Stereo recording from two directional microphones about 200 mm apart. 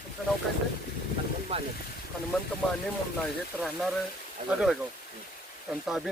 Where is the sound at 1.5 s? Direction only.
30° right (ahead or behind).